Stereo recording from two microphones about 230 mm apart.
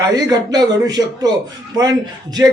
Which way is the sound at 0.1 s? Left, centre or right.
Centre.